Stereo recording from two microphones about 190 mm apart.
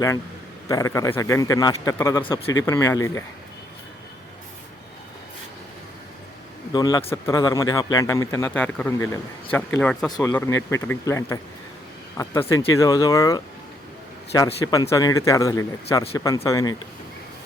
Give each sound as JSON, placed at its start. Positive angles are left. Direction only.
{"t": 0.7, "sound": "a man's voice", "side_deg": 15}
{"t": 6.7, "sound": "a man's voice", "side_deg": 20}
{"t": 10.1, "sound": "a man's voice", "side_deg": 15}